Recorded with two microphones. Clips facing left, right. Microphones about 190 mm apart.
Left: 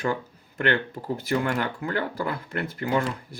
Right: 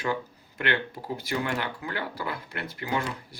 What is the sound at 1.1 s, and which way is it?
Speech, 50° left (ahead or behind).